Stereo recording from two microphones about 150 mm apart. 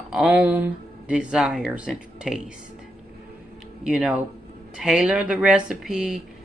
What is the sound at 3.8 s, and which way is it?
Speech, 5° right (ahead or behind).